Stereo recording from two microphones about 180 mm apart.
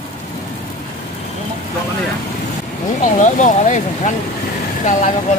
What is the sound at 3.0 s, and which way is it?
Speech, 45° left (ahead or behind).